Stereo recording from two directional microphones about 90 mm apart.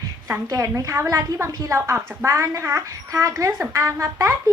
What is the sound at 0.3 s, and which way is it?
A woman's voice, 35° right (ahead or behind).